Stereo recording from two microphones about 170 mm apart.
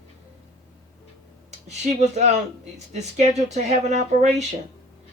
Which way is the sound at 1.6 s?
40° right (ahead or behind).